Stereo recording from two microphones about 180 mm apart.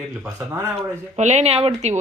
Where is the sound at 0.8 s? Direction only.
40° right (ahead or behind).